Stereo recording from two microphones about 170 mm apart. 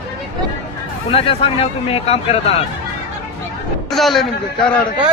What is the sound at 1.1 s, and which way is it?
Speech, 35° left (ahead or behind).